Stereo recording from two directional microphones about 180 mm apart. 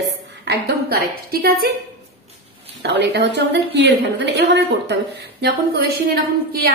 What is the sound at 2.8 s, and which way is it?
A woman's voice, 70° right (ahead or behind).